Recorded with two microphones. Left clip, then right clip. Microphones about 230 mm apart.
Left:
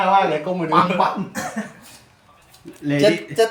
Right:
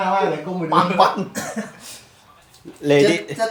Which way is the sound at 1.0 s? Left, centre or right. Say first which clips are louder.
Right 4 dB; right.